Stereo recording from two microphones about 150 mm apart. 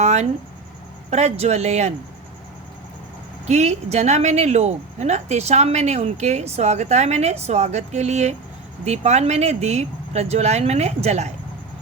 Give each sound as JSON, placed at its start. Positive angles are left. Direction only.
{"t": 0.0, "sound": "a sound", "side_deg": -50}
{"t": 1.1, "sound": "speech", "side_deg": -45}
{"t": 3.4, "sound": "speech", "side_deg": -50}